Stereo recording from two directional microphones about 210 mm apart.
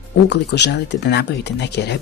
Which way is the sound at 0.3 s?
55° left (ahead or behind).